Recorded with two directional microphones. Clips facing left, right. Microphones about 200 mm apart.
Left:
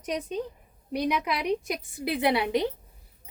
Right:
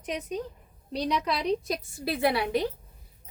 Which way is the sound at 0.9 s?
10° left (ahead or behind).